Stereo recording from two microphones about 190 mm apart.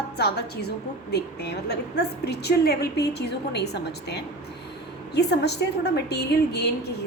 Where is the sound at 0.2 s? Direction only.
55° left (ahead or behind).